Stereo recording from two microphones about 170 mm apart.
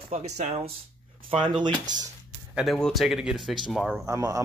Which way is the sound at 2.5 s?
Centre (ahead or behind).